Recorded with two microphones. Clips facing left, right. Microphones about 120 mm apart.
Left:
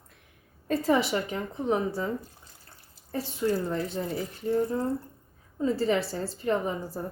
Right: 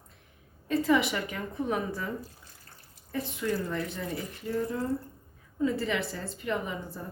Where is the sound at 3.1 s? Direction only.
30° left (ahead or behind).